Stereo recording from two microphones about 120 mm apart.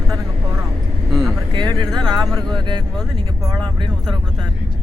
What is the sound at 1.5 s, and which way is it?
Speech, 40° right (ahead or behind).